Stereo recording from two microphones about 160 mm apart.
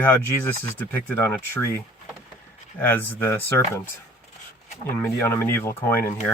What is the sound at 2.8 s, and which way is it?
Speech, 10° left (ahead or behind).